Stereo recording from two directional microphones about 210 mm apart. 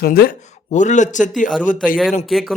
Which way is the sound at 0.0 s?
45° left (ahead or behind).